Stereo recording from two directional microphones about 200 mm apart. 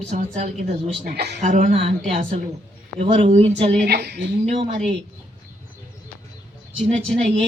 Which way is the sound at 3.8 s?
55° right (ahead or behind).